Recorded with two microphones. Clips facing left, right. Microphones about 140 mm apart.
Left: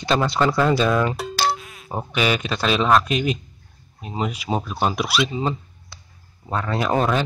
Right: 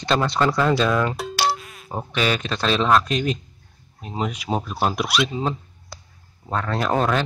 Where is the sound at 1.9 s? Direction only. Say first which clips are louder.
Left 1 dB; 10° left (ahead or behind).